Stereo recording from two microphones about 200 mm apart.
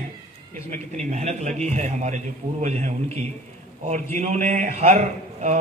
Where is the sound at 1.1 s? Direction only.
35° right (ahead or behind).